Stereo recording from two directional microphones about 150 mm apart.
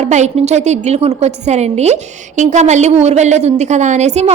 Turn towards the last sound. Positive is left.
turn(degrees=-50)  # may be behind; listen again after turning